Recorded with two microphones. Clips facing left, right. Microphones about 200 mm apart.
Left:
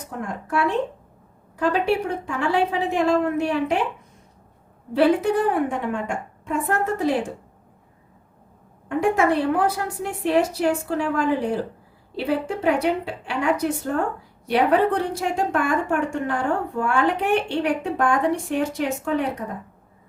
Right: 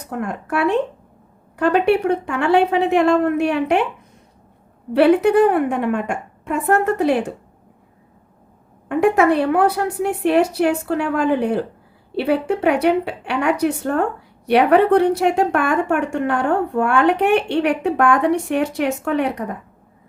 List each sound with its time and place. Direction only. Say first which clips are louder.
0.2 s a woman's voice: right 3 dB; 65° right (ahead or behind)
4.9 s a woman's voice: right 6 dB; 65° right (ahead or behind)
8.9 s a woman's voice: right 5 dB; 65° right (ahead or behind)